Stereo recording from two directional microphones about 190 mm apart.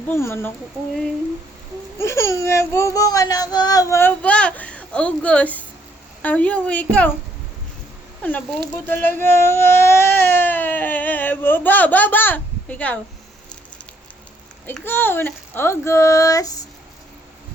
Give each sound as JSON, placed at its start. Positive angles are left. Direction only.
{"t": 0.1, "sound": "speech", "side_deg": 15}
{"t": 2.0, "sound": "speech", "side_deg": 15}
{"t": 8.2, "sound": "speech", "side_deg": 10}
{"t": 14.7, "sound": "speech", "side_deg": 10}